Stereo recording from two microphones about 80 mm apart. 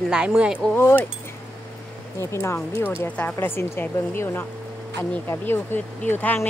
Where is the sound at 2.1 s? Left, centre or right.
Left.